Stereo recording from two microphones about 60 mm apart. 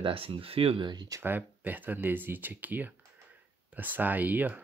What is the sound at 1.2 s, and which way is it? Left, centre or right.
Speech, right.